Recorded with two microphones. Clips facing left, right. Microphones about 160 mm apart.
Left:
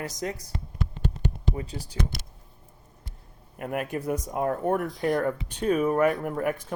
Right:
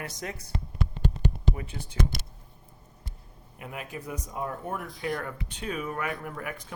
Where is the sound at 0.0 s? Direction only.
35° left (ahead or behind).